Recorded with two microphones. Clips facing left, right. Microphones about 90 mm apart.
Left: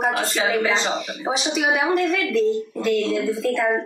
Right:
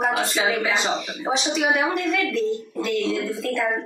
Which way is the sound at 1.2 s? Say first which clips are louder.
Even; 5° left (ahead or behind).